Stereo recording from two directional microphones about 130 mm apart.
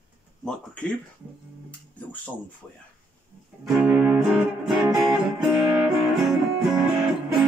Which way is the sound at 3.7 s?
10° right (ahead or behind).